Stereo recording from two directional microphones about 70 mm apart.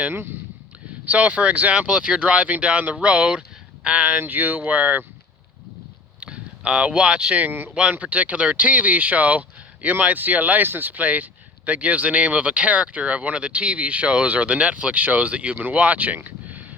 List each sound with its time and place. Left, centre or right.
1.0 s speech: centre
6.1 s a sound: centre
7.3 s speech: right
7.7 s speech: centre